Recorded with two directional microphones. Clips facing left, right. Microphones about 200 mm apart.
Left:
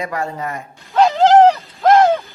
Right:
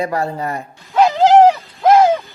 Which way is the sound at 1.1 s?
Centre (ahead or behind).